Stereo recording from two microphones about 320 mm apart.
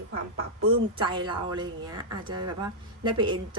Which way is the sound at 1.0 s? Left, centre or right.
Centre.